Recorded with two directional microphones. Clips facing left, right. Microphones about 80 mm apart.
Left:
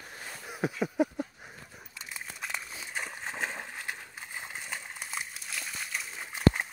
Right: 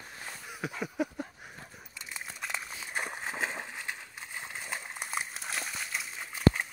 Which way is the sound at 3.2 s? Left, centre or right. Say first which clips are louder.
Right 1 dB; centre.